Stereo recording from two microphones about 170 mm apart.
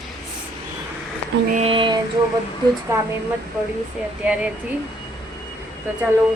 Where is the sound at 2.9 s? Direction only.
15° right (ahead or behind).